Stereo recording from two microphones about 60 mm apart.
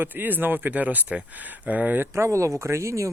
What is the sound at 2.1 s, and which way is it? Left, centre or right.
Speech, right.